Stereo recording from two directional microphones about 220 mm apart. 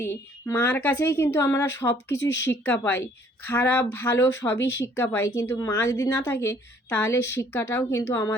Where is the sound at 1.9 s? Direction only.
50° left (ahead or behind).